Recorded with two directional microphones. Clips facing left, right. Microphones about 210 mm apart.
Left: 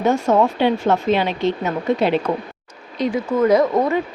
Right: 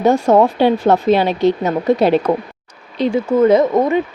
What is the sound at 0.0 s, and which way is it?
Speech, 35° right (ahead or behind).